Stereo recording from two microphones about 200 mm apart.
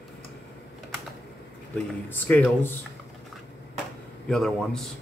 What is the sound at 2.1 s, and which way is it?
Speech, 10° left (ahead or behind).